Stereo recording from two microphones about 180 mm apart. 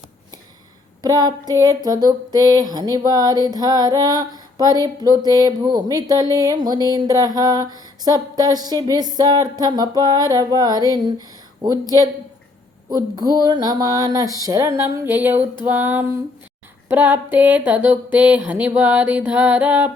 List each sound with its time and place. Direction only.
1.0 s female singing: 20° right (ahead or behind)
12.9 s female singing: 20° right (ahead or behind)
14.4 s a sound: 15° right (ahead or behind)